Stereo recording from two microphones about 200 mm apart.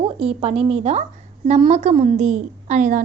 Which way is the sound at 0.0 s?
25° right (ahead or behind).